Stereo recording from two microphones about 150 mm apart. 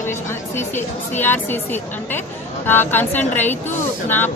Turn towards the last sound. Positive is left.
turn(degrees=15)  # may be behind; listen again after turning